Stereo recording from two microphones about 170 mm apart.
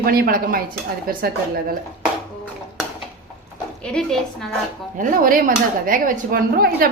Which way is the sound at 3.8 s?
5° left (ahead or behind).